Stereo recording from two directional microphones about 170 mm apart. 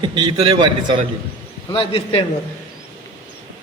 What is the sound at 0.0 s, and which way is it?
Speech, 25° right (ahead or behind).